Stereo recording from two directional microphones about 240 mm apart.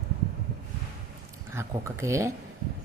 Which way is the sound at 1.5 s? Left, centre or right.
Centre.